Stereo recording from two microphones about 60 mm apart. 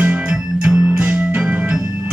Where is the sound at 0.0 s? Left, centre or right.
Centre.